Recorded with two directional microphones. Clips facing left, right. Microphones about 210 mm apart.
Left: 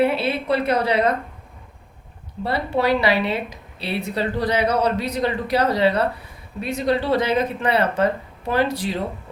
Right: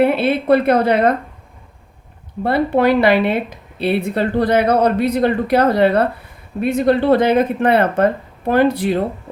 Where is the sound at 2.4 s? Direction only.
55° right (ahead or behind).